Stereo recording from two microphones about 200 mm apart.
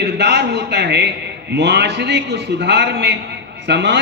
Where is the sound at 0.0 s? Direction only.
60° right (ahead or behind).